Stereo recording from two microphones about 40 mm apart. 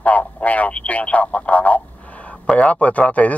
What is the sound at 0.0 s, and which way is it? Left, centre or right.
Speech, left.